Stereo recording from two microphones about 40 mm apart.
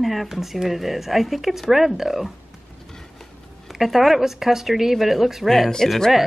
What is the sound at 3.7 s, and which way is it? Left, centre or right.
Speech, centre.